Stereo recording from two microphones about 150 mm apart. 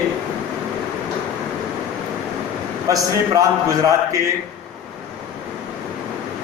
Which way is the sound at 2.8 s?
20° right (ahead or behind).